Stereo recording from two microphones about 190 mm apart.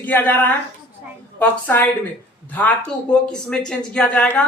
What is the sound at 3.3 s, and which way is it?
Speech, 5° left (ahead or behind).